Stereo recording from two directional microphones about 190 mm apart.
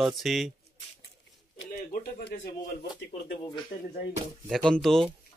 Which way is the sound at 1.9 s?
55° left (ahead or behind).